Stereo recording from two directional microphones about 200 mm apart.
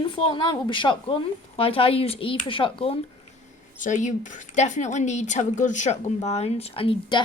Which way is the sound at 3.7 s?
40° left (ahead or behind).